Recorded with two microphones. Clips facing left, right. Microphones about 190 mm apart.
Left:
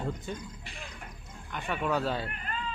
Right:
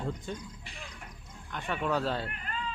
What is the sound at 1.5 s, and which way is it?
Speech, 10° left (ahead or behind).